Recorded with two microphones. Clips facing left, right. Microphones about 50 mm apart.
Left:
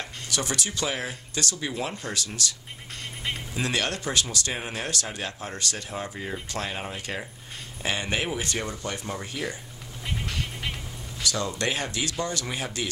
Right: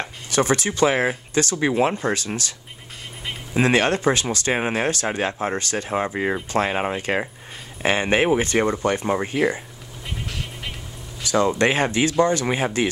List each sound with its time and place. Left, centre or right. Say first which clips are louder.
0.0 s speech: right 9 dB; right
3.5 s speech: right 11 dB; right
4.6 s speech: right 9 dB; right
5.9 s speech: right 11 dB; right
6.3 s speech: right 10 dB; right
10.0 s music: even; centre
11.2 s speech: right 9 dB; right